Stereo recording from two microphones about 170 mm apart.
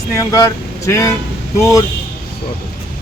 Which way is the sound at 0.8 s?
15° left (ahead or behind).